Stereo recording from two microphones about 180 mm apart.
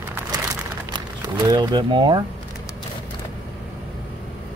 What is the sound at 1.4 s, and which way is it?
Speech, 20° right (ahead or behind).